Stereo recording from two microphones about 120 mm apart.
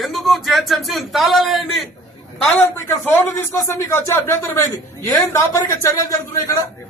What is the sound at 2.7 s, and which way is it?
Speech, 20° left (ahead or behind).